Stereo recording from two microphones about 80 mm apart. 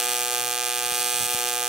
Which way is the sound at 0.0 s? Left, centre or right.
Centre.